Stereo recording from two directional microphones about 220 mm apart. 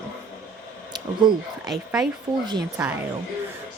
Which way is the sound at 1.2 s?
20° right (ahead or behind).